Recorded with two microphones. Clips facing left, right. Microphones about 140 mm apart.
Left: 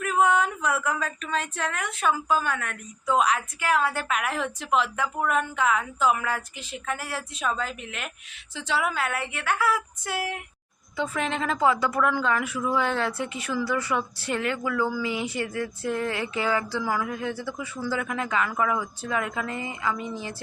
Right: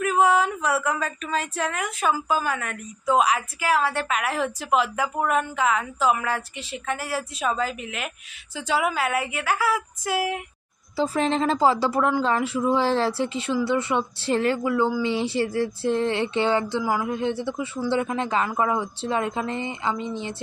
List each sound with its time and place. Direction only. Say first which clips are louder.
0.0 s a woman's voice: right 3 dB; 5° right (ahead or behind)
10.9 s a woman's voice: right 5 dB; 35° right (ahead or behind)